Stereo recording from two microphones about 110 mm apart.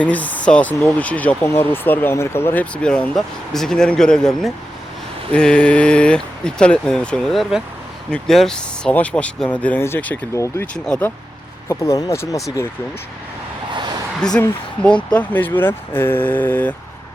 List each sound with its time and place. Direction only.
0.0 s speech: 15° left (ahead or behind)
10.3 s speech: 25° left (ahead or behind)
11.7 s speech: 30° left (ahead or behind)
14.2 s speech: 5° left (ahead or behind)